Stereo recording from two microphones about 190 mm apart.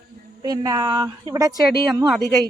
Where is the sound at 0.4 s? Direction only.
20° right (ahead or behind).